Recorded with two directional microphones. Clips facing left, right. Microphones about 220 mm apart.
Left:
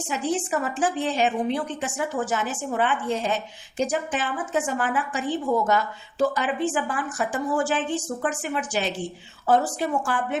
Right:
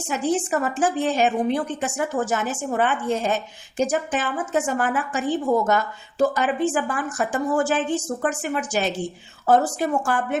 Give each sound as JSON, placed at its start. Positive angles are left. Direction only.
{"t": 0.1, "sound": "a woman's voice", "side_deg": -45}